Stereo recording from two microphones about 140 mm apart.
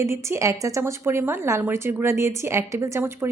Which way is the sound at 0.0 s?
20° right (ahead or behind).